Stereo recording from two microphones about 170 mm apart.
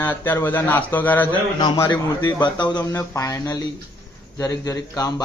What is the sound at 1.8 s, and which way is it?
A man's voice, 25° left (ahead or behind).